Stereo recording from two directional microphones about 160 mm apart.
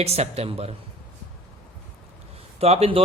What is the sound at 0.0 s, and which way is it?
Speech, 40° right (ahead or behind).